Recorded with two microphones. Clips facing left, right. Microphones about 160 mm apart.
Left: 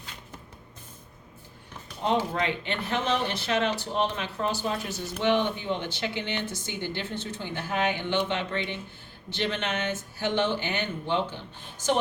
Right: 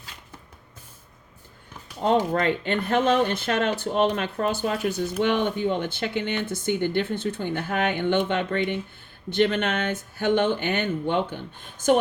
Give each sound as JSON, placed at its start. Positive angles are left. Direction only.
{"t": 2.3, "sound": "speech", "side_deg": -50}